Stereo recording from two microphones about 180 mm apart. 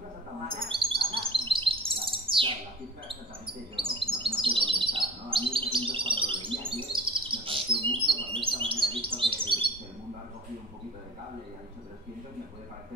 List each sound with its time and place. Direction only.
0.7 s chirp: 30° right (ahead or behind)
3.9 s bird: 30° right (ahead or behind)
8.1 s chirp: 30° right (ahead or behind)